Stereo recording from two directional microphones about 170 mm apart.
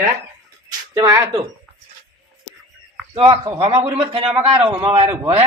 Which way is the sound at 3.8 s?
35° right (ahead or behind).